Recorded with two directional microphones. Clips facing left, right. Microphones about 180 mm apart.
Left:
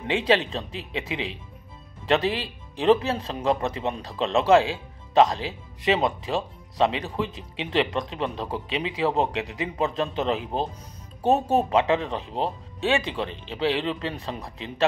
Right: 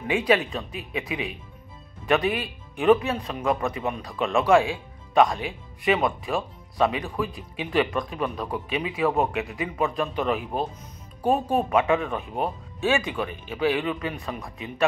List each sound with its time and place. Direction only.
0.0 s speech: 25° left (ahead or behind)